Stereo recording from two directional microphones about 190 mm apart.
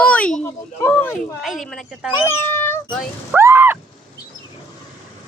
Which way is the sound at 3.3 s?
10° right (ahead or behind).